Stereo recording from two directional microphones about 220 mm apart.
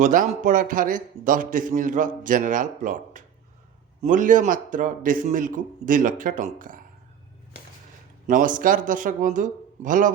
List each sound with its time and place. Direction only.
0.0 s a man's voice: 35° right (ahead or behind)
8.3 s a man's voice: 35° right (ahead or behind)